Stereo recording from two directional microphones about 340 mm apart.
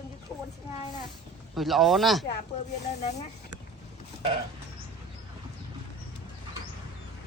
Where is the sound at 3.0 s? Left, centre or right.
Centre.